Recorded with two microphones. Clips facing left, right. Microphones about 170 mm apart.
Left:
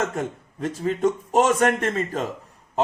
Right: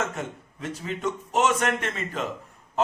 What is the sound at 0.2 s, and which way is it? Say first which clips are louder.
A man's voice: left 6 dB; 50° left (ahead or behind).